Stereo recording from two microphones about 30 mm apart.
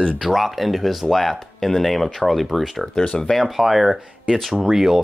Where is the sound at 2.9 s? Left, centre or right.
Left.